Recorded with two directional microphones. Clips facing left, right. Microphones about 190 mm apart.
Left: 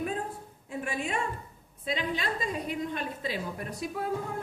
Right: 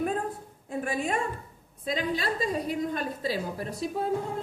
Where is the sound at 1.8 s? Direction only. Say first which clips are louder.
Right 3 dB; 40° right (ahead or behind).